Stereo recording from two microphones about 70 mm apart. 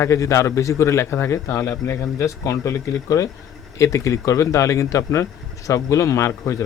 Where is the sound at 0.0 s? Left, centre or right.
Left.